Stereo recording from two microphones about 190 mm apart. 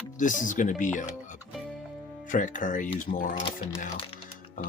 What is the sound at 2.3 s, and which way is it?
Speech, 45° left (ahead or behind).